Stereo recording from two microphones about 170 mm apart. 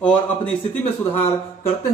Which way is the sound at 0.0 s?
5° left (ahead or behind).